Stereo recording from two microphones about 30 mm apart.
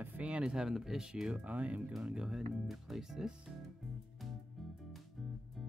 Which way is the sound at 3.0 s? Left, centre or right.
Centre.